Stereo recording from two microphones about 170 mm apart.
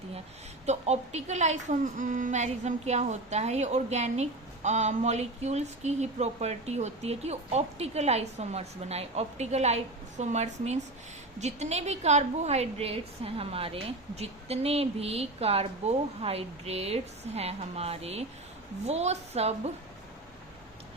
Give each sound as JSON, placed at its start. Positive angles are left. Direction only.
{"t": 0.6, "sound": "a woman's voice", "side_deg": -40}